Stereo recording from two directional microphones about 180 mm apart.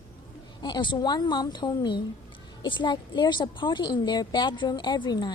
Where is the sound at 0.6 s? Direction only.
25° left (ahead or behind).